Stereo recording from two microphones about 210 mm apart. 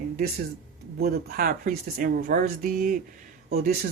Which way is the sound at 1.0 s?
45° right (ahead or behind).